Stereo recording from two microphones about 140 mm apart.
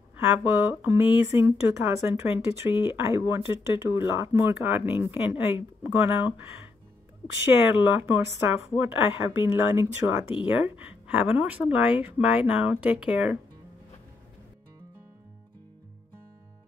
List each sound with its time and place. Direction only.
0.5 s speech: 15° right (ahead or behind)